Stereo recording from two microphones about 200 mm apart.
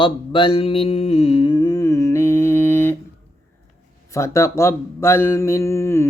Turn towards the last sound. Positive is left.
turn(degrees=15)  # may be behind; listen again after turning